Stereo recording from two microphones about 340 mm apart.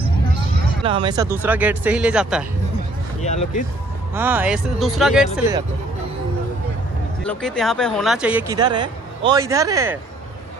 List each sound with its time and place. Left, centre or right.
0.8 s speech: centre
3.2 s speech: centre
4.1 s speech: centre
7.2 s speech: centre